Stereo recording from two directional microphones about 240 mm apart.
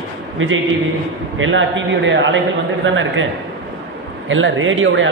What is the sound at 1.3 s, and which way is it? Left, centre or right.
A man's voice, right.